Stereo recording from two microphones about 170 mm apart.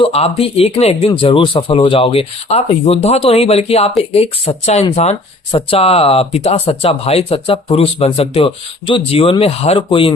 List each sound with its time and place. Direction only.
0.0 s speech: 35° left (ahead or behind)